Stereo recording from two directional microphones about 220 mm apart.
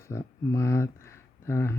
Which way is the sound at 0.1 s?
15° left (ahead or behind).